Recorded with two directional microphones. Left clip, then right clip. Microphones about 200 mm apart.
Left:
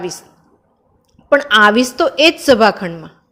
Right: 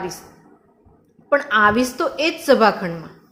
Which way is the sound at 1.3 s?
35° left (ahead or behind).